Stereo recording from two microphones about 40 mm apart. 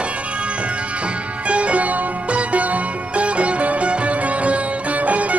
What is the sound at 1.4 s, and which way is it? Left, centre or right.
Music, right.